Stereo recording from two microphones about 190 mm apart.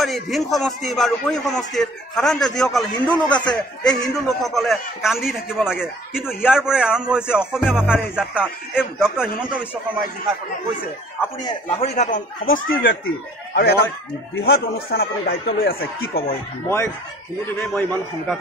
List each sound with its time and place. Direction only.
0.0 s a man's voice: centre (ahead or behind)
3.9 s speech: 20° left (ahead or behind)
4.3 s a man's voice: centre (ahead or behind)
11.6 s a man's voice: 30° left (ahead or behind)
12.0 s speech: 45° left (ahead or behind)
16.6 s a man's voice: 15° left (ahead or behind)